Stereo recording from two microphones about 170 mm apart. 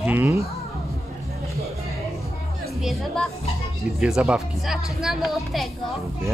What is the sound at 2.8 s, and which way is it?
Speech, centre (ahead or behind).